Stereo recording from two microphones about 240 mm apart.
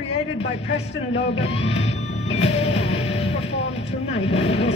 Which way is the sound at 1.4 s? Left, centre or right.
Left.